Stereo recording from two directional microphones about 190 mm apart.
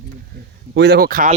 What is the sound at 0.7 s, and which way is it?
Speech, 60° right (ahead or behind).